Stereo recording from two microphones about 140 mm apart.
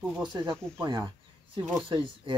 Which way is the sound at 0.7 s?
5° left (ahead or behind).